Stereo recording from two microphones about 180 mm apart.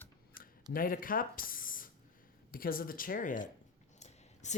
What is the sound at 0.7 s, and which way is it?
Speech, 55° left (ahead or behind).